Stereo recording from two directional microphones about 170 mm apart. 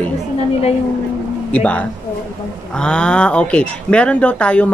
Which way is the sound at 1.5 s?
10° left (ahead or behind).